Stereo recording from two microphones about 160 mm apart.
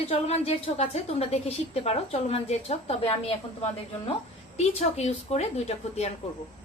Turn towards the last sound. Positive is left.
turn(degrees=45)  # may be behind; listen again after turning